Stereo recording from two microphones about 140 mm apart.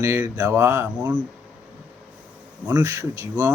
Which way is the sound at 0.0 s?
20° right (ahead or behind).